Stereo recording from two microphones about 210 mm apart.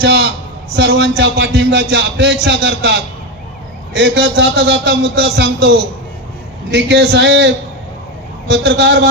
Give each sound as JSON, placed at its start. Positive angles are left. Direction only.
{"t": 0.0, "sound": "a man's voice", "side_deg": -50}